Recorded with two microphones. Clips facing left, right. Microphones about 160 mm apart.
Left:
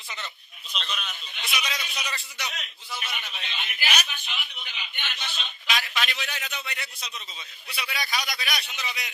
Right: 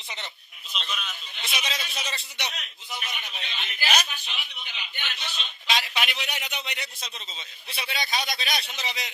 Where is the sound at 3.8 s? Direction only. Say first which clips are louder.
Right 3 dB; 35° right (ahead or behind).